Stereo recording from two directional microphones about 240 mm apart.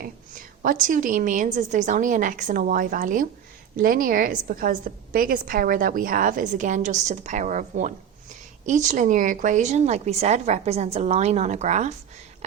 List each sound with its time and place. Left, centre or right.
0.0 s a woman's voice: right